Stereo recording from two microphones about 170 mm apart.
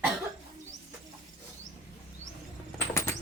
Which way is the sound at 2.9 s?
15° left (ahead or behind).